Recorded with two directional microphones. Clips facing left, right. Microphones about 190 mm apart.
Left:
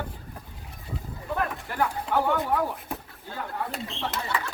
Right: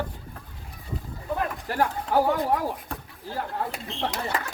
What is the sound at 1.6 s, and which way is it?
Speech, 40° right (ahead or behind).